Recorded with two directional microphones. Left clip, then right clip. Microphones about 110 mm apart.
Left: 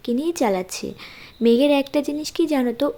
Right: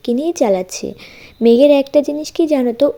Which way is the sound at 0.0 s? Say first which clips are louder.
Right 6 dB; 30° right (ahead or behind).